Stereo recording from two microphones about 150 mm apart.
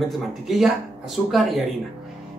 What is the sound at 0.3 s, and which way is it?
Speech, centre (ahead or behind).